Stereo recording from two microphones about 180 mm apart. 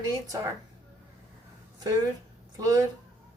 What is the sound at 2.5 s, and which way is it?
Speech, 20° right (ahead or behind).